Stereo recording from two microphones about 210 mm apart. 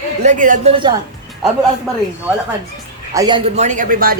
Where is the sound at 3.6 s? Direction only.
35° right (ahead or behind).